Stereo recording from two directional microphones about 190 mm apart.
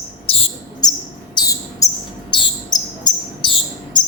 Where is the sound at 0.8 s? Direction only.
20° left (ahead or behind).